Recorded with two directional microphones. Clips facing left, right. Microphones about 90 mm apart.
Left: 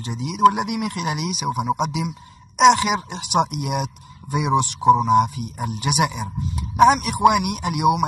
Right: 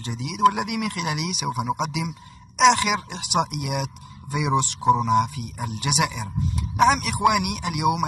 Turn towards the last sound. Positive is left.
turn(degrees=20)  # may be behind; listen again after turning